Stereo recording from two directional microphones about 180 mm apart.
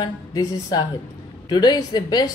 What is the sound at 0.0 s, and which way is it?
Speech, 20° left (ahead or behind).